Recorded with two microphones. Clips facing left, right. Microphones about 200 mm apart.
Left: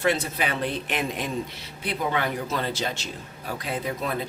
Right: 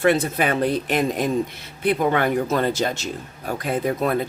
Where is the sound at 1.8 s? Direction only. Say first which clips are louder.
Right 7 dB; 50° right (ahead or behind).